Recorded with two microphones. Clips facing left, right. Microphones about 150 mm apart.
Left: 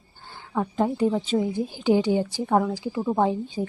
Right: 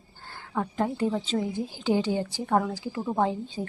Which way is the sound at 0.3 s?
15° left (ahead or behind).